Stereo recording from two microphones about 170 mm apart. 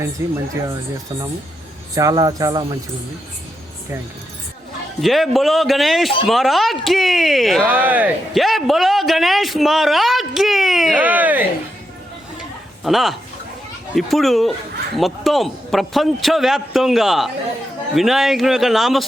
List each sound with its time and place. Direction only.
0.2 s speech: 15° right (ahead or behind)
2.0 s speech: 20° right (ahead or behind)
4.9 s speech: centre (ahead or behind)
12.8 s speech: centre (ahead or behind)